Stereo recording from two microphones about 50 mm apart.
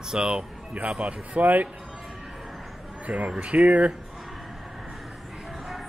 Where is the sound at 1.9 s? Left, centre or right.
Centre.